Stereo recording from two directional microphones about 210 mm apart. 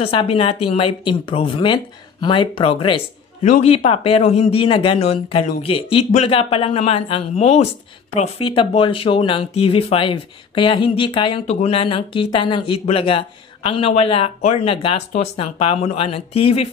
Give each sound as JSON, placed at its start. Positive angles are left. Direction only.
{"t": 0.0, "sound": "speech", "side_deg": 25}